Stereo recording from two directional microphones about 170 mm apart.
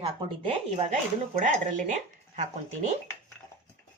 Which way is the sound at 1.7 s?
45° right (ahead or behind).